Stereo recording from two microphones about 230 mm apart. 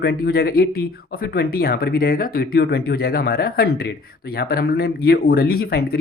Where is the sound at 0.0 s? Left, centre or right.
Left.